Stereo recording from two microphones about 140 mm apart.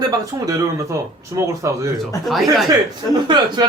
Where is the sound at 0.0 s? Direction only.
25° right (ahead or behind).